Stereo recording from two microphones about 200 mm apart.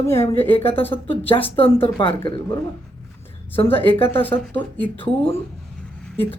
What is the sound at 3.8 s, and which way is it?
Speech, 30° left (ahead or behind).